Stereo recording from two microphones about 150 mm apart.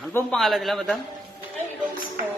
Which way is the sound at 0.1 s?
15° left (ahead or behind).